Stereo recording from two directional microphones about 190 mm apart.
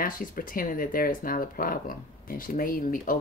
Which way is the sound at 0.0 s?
45° left (ahead or behind).